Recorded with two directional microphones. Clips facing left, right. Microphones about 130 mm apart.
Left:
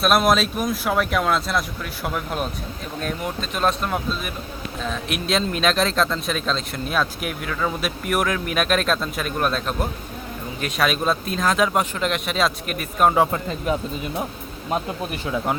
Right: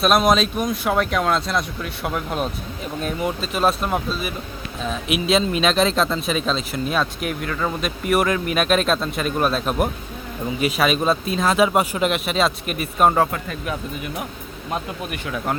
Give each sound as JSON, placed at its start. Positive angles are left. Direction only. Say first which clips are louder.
{"t": 0.0, "sound": "a man's voice", "louder": "right 1 dB", "side_deg": 0}
{"t": 13.3, "sound": "speech", "louder": "left 3 dB", "side_deg": 25}
{"t": 15.1, "sound": "speech", "louder": "left 1 dB", "side_deg": 25}